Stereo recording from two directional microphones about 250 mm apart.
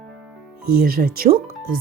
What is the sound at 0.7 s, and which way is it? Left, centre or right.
Speech, right.